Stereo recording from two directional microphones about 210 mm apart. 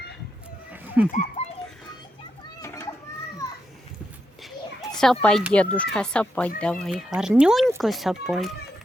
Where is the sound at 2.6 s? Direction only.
15° left (ahead or behind).